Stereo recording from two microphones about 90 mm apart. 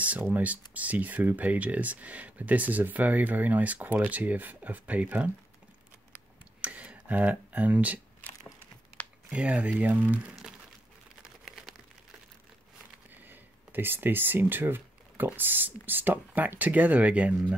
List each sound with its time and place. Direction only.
0.0 s speech: 15° right (ahead or behind)
6.6 s tick: 15° right (ahead or behind)
9.3 s speech: 15° right (ahead or behind)
11.2 s a sound: centre (ahead or behind)
13.2 s speech: 20° right (ahead or behind)